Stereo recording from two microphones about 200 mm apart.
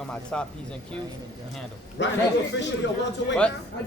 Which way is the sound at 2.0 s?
60° left (ahead or behind).